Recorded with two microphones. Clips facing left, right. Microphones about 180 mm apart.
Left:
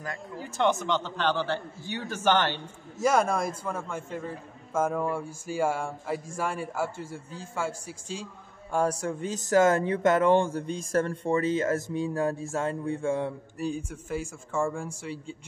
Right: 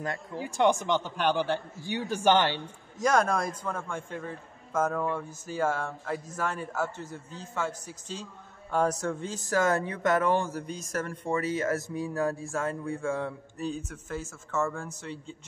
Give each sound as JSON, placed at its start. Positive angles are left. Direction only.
{"t": 0.4, "sound": "a man's voice", "side_deg": -15}
{"t": 3.0, "sound": "a man's voice", "side_deg": 10}
{"t": 13.6, "sound": "a man's voice", "side_deg": 10}